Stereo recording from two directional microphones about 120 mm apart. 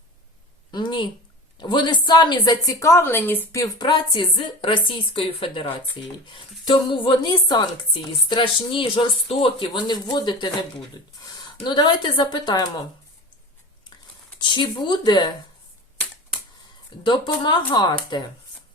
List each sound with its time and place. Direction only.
0.7 s a woman's voice: 40° left (ahead or behind)
3.8 s a woman's voice: 40° left (ahead or behind)
14.4 s a woman's voice: 40° left (ahead or behind)
17.0 s a woman's voice: 45° left (ahead or behind)